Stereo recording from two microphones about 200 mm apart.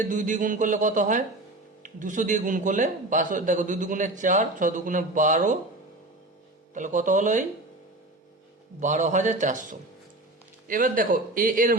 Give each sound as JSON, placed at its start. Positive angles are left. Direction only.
{"t": 0.1, "sound": "a man's voice", "side_deg": -40}
{"t": 6.7, "sound": "a man's voice", "side_deg": -40}
{"t": 8.8, "sound": "a man's voice", "side_deg": -40}